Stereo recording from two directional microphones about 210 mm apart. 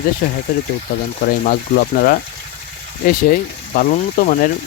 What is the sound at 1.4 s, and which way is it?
Speech, 50° left (ahead or behind).